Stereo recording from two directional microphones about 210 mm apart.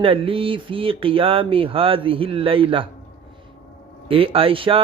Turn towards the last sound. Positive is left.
turn(degrees=-25)  # may be behind; listen again after turning